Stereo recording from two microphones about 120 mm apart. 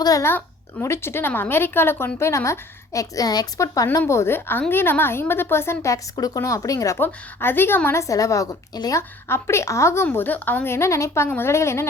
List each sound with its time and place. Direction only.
0.0 s speech: 30° left (ahead or behind)
0.3 s a woman's voice: 20° left (ahead or behind)
4.0 s a woman's voice: 20° left (ahead or behind)